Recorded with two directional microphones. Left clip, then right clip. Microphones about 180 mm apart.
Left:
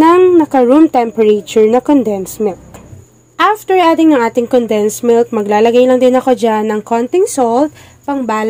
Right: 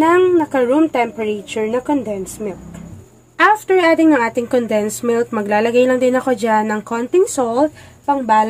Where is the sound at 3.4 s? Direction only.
25° left (ahead or behind).